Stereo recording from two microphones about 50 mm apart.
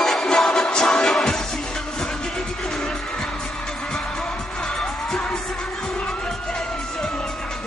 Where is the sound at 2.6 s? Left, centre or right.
Centre.